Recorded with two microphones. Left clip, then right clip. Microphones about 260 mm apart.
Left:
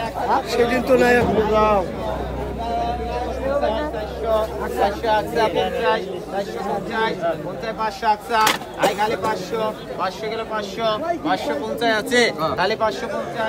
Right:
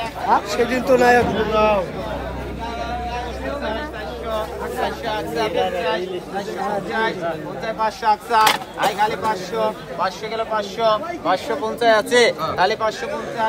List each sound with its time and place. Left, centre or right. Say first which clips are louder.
0.5 s a man's voice: even; centre
4.3 s speech: left 4 dB; left
6.9 s speech: even; centre
7.6 s a man's voice: right 2 dB; centre
12.5 s speech: right 1 dB; centre